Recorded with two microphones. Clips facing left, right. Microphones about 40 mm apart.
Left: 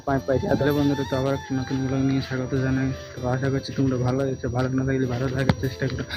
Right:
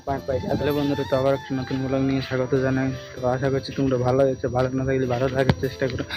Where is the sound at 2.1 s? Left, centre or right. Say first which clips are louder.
Right 2 dB; right.